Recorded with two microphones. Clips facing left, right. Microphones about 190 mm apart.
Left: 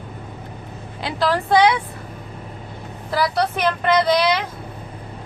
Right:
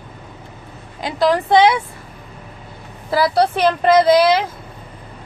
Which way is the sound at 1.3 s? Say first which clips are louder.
Right 1 dB; 20° right (ahead or behind).